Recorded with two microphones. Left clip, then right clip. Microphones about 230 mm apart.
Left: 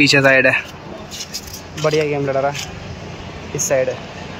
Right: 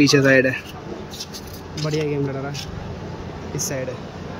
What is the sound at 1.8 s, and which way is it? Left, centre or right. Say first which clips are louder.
Speech: left 7 dB; left.